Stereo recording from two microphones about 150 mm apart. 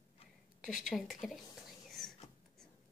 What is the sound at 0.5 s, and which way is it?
Speech, centre (ahead or behind).